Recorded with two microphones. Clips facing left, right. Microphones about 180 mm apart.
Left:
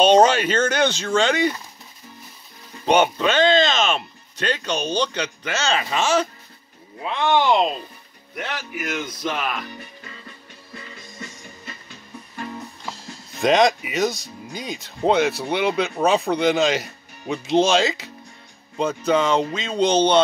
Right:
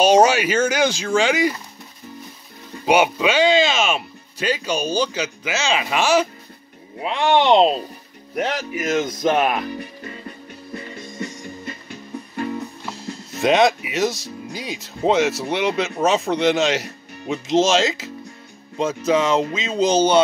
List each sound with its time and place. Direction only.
0.0 s speech: 10° right (ahead or behind)
2.8 s speech: 10° right (ahead or behind); by 7.8 s 30° right (ahead or behind)
8.4 s speech: 40° right (ahead or behind)
13.4 s speech: 5° right (ahead or behind)